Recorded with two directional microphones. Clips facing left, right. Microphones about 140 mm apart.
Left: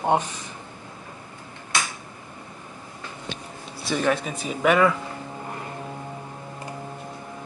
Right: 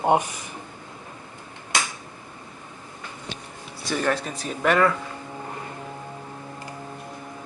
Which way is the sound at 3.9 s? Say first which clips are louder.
Left 1 dB; 10° left (ahead or behind).